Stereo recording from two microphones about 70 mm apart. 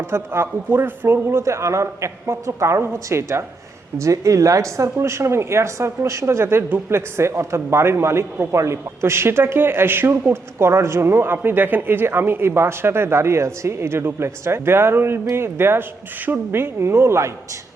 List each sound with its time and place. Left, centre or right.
0.0 s a man's voice: right